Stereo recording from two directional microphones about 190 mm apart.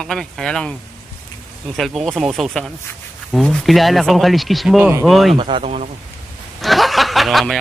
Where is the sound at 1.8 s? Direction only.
Centre (ahead or behind).